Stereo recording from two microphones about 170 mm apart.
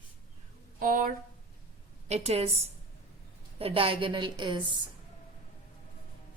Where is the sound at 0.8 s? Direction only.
55° right (ahead or behind).